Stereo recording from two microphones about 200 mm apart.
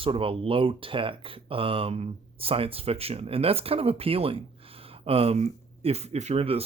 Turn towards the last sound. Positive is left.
turn(degrees=-30)  # may be behind; listen again after turning